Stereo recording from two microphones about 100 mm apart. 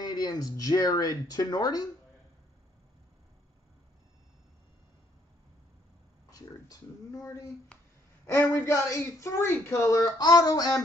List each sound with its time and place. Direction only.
0.0 s speech: 40° left (ahead or behind)
6.3 s speech: 35° left (ahead or behind)